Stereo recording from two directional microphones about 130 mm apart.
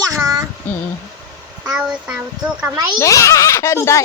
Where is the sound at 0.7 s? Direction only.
15° left (ahead or behind).